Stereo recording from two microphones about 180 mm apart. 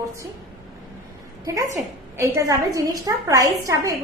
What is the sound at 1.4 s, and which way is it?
A woman's voice, 20° right (ahead or behind).